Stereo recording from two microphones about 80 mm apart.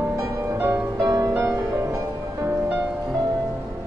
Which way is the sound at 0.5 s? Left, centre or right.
Right.